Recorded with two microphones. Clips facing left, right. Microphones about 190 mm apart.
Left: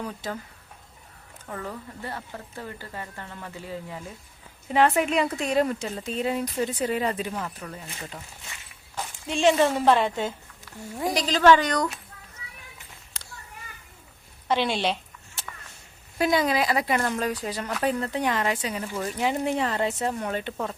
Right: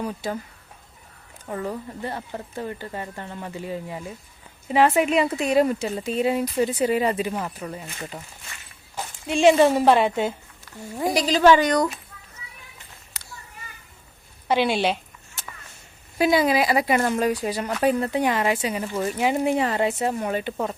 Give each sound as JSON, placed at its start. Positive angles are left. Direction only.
{"t": 0.0, "sound": "speech", "side_deg": -15}
{"t": 1.5, "sound": "speech", "side_deg": -20}
{"t": 4.7, "sound": "speech", "side_deg": -5}
{"t": 13.2, "sound": "a sound", "side_deg": -5}
{"t": 14.4, "sound": "speech", "side_deg": -10}
{"t": 16.1, "sound": "speech", "side_deg": -5}